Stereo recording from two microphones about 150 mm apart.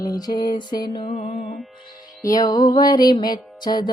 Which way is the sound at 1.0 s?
70° left (ahead or behind).